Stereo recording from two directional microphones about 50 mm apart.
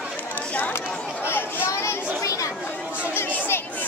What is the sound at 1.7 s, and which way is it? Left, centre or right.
Chatter, left.